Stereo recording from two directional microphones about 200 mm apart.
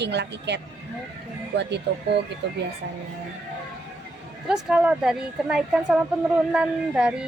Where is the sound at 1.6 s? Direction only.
60° right (ahead or behind).